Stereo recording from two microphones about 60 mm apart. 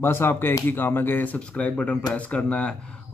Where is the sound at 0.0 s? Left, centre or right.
Left.